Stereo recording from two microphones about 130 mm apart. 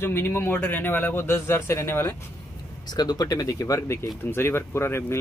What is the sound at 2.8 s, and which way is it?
Speech, 30° left (ahead or behind).